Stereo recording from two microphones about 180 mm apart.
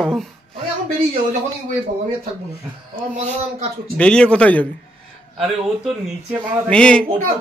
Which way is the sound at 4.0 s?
5° left (ahead or behind).